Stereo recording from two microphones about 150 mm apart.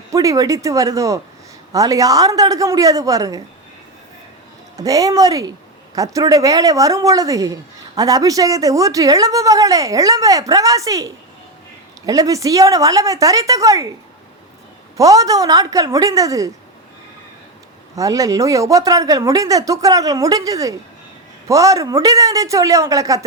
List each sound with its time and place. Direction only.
0.1 s speech: 20° right (ahead or behind)
4.8 s speech: 25° right (ahead or behind)
14.9 s speech: 25° right (ahead or behind)
17.9 s speech: 20° right (ahead or behind)